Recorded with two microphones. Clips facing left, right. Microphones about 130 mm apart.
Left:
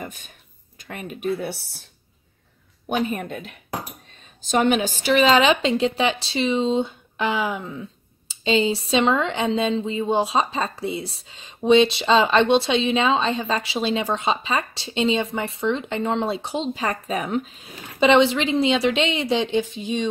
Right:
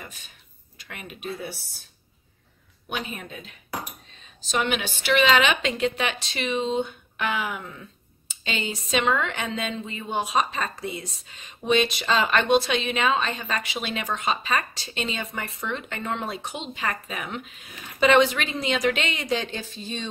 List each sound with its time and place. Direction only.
0.0 s speech: 50° left (ahead or behind)
1.3 s speech: 65° left (ahead or behind)
2.9 s speech: 50° left (ahead or behind)
4.4 s a woman's voice: 45° left (ahead or behind); by 20.1 s 15° left (ahead or behind)